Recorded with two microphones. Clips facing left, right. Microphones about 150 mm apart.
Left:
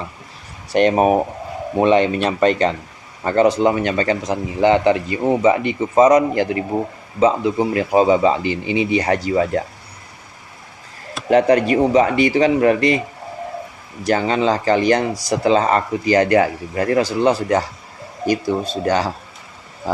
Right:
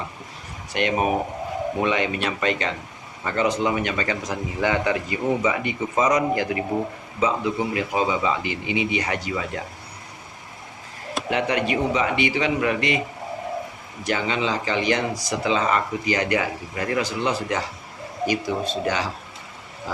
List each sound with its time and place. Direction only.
0.7 s speech: 40° left (ahead or behind)
11.3 s speech: 40° left (ahead or behind)
14.0 s speech: 40° left (ahead or behind)